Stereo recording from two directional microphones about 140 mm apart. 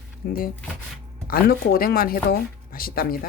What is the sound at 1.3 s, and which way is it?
Speech, 90° left.